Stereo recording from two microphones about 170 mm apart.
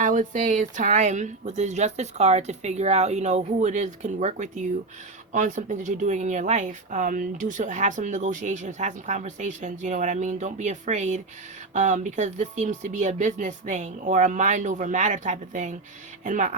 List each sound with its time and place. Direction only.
0.0 s speech: 50° right (ahead or behind)